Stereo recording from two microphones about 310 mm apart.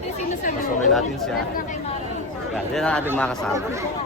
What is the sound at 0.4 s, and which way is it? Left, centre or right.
Speech, left.